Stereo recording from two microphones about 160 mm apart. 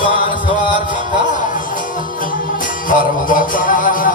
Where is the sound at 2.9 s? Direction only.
60° left (ahead or behind).